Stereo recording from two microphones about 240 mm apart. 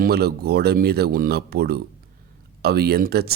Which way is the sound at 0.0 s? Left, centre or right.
Right.